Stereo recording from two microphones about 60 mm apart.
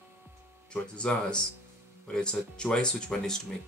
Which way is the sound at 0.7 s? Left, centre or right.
Centre.